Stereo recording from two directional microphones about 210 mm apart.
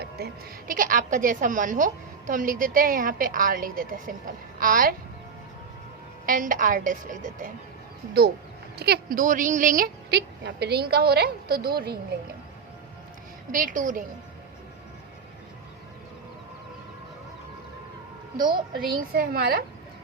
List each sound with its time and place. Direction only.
0.2 s a woman's voice: 50° right (ahead or behind)
6.2 s a woman's voice: 40° right (ahead or behind)
8.8 s a woman's voice: 45° right (ahead or behind)
13.5 s a woman's voice: 40° right (ahead or behind)
18.4 s a woman's voice: 20° right (ahead or behind)
19.1 s a woman's voice: 45° right (ahead or behind)